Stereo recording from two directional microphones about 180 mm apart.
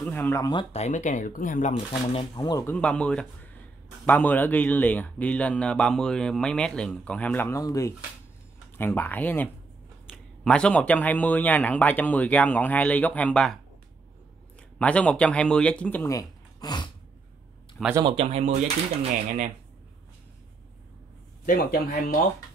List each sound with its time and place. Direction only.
0.0 s speech: 10° left (ahead or behind)
0.7 s speech: 40° left (ahead or behind)
1.7 s speech: 30° left (ahead or behind)
2.6 s speech: 10° left (ahead or behind)
14.8 s speech: 5° left (ahead or behind); by 16.9 s 25° left (ahead or behind)
17.9 s speech: 30° right (ahead or behind)
21.5 s speech: 55° left (ahead or behind)